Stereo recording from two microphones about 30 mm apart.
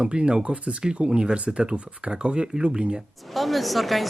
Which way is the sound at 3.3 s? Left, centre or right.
Centre.